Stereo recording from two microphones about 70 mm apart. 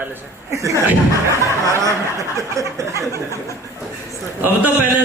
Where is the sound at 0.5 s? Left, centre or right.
Right.